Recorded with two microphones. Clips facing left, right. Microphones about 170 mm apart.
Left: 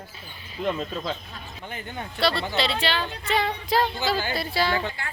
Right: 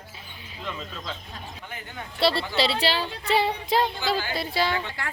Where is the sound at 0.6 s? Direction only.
45° left (ahead or behind).